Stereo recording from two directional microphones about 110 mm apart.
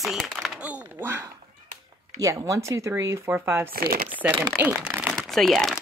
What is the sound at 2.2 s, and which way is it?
Speech, 30° right (ahead or behind).